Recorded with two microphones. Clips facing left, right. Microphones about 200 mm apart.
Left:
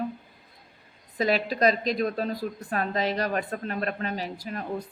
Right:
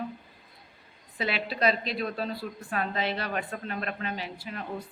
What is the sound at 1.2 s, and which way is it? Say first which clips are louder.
A woman's voice: left 6 dB; 40° left (ahead or behind).